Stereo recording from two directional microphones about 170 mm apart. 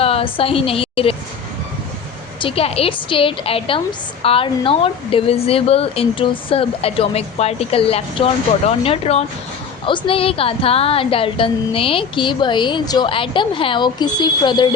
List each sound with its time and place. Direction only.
0.0 s a woman's voice: 35° left (ahead or behind)
2.4 s a woman's voice: 35° left (ahead or behind)